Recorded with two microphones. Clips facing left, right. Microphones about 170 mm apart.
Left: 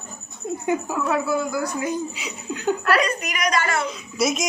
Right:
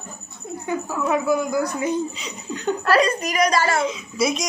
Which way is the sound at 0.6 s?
20° left (ahead or behind).